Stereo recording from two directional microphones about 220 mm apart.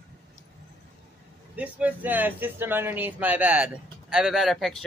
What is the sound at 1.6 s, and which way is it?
Speech, 5° right (ahead or behind).